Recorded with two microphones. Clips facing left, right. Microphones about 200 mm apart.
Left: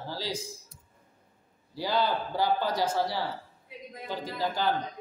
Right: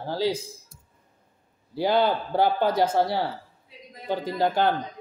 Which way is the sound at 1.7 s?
60° right (ahead or behind).